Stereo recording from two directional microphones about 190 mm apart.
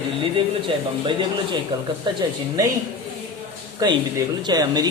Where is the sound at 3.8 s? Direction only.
20° right (ahead or behind).